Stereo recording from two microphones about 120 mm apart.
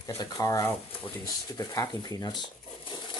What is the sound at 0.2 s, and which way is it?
Speech, 30° left (ahead or behind).